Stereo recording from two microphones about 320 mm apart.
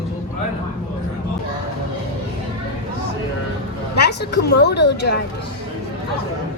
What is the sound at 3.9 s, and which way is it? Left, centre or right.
A woman's voice, left.